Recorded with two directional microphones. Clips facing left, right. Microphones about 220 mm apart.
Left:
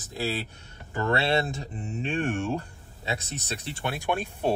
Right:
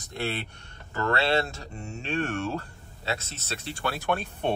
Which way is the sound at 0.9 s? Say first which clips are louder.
Even; 20° left (ahead or behind).